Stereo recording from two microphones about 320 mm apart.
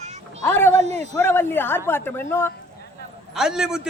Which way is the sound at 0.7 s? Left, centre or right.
Right.